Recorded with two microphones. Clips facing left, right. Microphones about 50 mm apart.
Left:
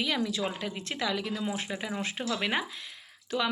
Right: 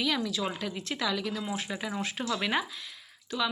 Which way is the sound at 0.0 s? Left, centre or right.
Left.